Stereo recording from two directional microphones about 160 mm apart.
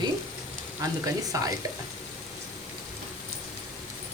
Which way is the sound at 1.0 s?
20° right (ahead or behind).